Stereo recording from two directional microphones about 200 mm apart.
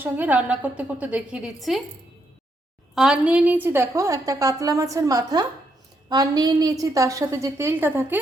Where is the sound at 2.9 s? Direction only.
5° right (ahead or behind).